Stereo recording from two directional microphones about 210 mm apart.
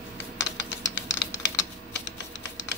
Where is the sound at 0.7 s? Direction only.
60° left (ahead or behind).